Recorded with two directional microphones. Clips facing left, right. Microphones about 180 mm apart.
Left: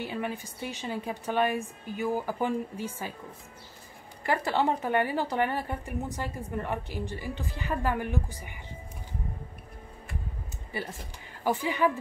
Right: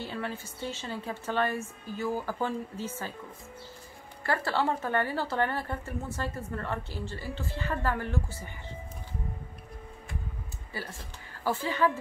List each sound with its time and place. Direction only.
0.0 s a woman's voice: 15° left (ahead or behind)
4.2 s a woman's voice: 15° left (ahead or behind)
10.7 s a woman's voice: 20° left (ahead or behind)